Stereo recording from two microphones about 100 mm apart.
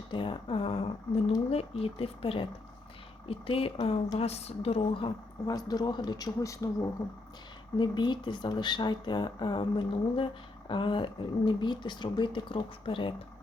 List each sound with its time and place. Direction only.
0.1 s speech: 60° left (ahead or behind)
1.5 s speech: 75° left (ahead or behind)
4.2 s a woman's voice: 90° left; by 5.1 s 60° left (ahead or behind)
5.5 s speech: 40° left (ahead or behind)
7.8 s speech: 50° left (ahead or behind)